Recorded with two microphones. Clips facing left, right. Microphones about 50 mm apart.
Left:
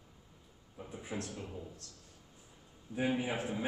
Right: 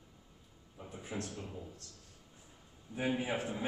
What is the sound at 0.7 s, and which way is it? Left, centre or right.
Speech, centre.